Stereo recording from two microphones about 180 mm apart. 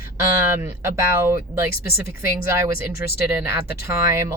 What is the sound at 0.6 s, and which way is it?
Speech, 10° right (ahead or behind).